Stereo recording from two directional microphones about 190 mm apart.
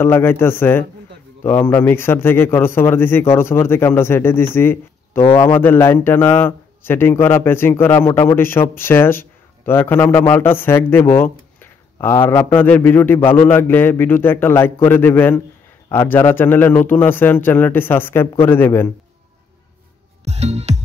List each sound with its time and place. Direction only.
0.0 s a man's voice: 10° left (ahead or behind)
20.2 s music: 35° right (ahead or behind)